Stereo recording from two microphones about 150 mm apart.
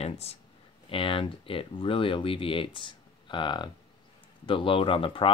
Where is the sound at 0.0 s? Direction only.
45° left (ahead or behind).